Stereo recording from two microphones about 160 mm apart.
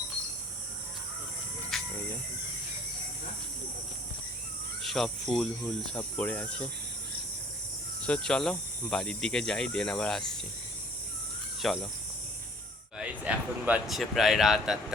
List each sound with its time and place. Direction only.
1.7 s hiss: centre (ahead or behind)
4.8 s speech: centre (ahead or behind)
8.0 s speech: 5° left (ahead or behind)
11.6 s speech: centre (ahead or behind)
13.0 s speech: 10° right (ahead or behind)